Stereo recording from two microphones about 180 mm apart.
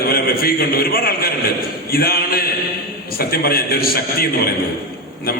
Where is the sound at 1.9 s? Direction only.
55° left (ahead or behind).